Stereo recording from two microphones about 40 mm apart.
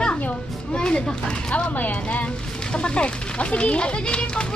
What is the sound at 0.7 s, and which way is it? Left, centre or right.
Speech, left.